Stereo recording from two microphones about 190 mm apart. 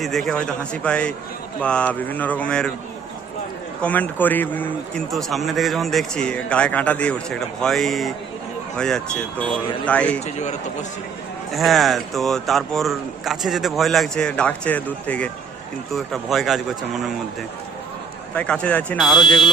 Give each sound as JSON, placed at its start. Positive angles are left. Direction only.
{"t": 0.0, "sound": "a man's voice", "side_deg": 0}
{"t": 1.6, "sound": "a sound", "side_deg": 5}
{"t": 3.8, "sound": "a man's voice", "side_deg": 5}
{"t": 9.4, "sound": "a sound", "side_deg": 5}
{"t": 10.2, "sound": "a man's voice", "side_deg": 35}
{"t": 11.5, "sound": "a man's voice", "side_deg": 0}
{"t": 18.3, "sound": "a man's voice", "side_deg": 5}
{"t": 19.2, "sound": "speech", "side_deg": 25}